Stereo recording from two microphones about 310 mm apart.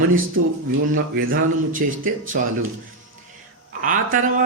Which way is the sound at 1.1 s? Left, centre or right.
Right.